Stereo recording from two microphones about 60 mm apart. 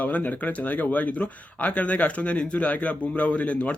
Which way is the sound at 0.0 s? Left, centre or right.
Left.